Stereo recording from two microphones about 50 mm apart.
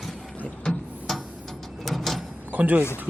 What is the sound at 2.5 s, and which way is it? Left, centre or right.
Speech, right.